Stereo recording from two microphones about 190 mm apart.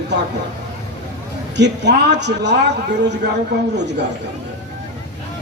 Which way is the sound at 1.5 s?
65° right (ahead or behind).